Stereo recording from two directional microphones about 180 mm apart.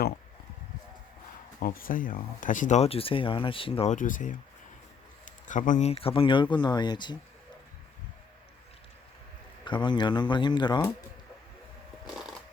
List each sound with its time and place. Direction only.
1.5 s speech: 55° left (ahead or behind); by 3.9 s 30° left (ahead or behind)
3.9 s speech: 45° left (ahead or behind); by 7.2 s 25° left (ahead or behind)
9.6 s speech: 25° left (ahead or behind)
12.0 s a sound: centre (ahead or behind)